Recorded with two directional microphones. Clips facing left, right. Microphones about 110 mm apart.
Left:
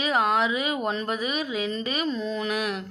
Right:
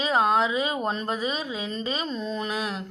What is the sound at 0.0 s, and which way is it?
A woman's voice, 30° right (ahead or behind).